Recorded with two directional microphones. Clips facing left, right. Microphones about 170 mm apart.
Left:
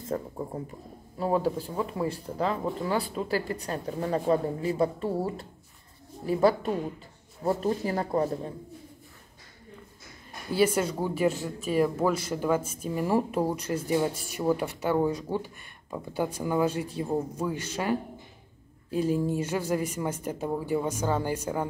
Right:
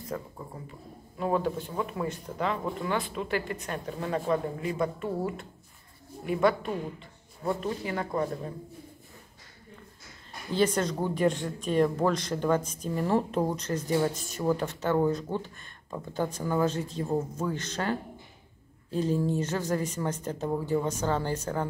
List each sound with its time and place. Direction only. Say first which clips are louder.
0.1 s speech: left 7 dB; 30° left (ahead or behind)
10.5 s speech: left 2 dB; 10° left (ahead or behind)